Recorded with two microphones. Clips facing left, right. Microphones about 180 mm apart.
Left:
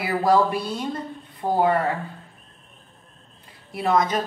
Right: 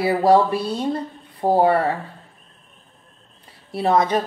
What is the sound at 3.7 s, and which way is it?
Speech, 30° right (ahead or behind).